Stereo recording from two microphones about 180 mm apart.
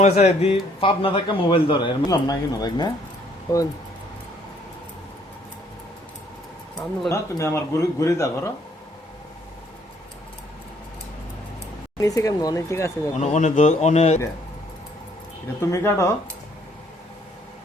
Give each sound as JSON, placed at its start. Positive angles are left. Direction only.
{"t": 0.0, "sound": "a man's voice", "side_deg": 35}
{"t": 7.1, "sound": "speech", "side_deg": 15}
{"t": 11.9, "sound": "a man's voice", "side_deg": 20}
{"t": 13.1, "sound": "speech", "side_deg": 40}
{"t": 15.7, "sound": "speech", "side_deg": 15}